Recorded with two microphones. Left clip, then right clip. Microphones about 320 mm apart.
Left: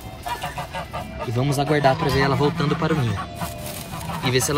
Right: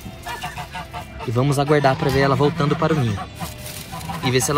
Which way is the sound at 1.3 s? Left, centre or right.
Centre.